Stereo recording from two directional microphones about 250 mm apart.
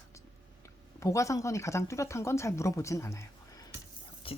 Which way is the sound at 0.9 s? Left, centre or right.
Centre.